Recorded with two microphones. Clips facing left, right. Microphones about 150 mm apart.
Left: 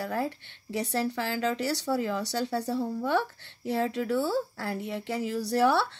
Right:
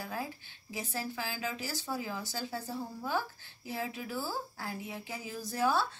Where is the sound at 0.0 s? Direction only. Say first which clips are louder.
Left 8 dB; 65° left (ahead or behind).